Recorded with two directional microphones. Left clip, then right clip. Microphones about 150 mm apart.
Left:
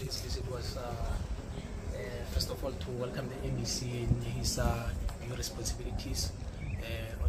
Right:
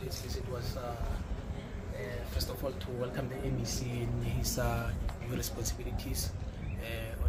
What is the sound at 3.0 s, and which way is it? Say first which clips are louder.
Speech: right 2 dB; 15° right (ahead or behind).